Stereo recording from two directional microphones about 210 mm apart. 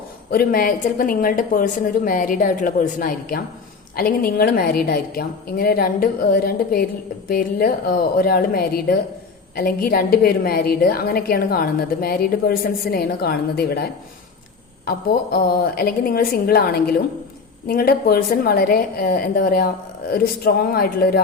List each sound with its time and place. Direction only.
0.3 s a woman's voice: 45° left (ahead or behind)
14.8 s a woman's voice: 45° left (ahead or behind)